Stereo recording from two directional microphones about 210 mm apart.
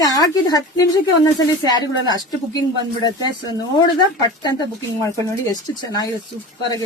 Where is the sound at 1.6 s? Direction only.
20° left (ahead or behind).